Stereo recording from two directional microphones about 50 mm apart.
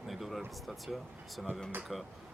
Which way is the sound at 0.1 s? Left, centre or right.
Centre.